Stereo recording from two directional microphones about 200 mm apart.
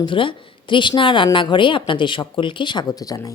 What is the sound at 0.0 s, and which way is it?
A woman's voice, 25° left (ahead or behind).